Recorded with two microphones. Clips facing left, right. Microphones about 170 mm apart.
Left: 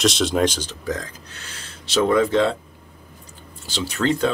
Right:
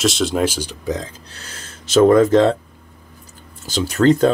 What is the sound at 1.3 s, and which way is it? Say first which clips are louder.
Speech: right 2 dB; 40° right (ahead or behind).